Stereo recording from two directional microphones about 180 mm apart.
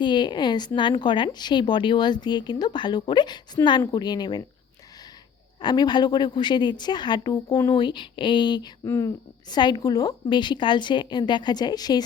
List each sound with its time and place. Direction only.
0.0 s a woman's voice: 25° left (ahead or behind)
5.5 s a woman's voice: 25° left (ahead or behind)